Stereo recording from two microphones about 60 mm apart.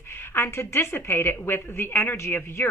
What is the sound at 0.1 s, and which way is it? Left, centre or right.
A woman's voice, left.